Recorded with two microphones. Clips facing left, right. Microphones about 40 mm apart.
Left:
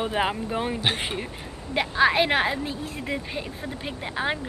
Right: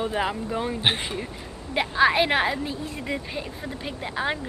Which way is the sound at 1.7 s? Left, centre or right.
Centre.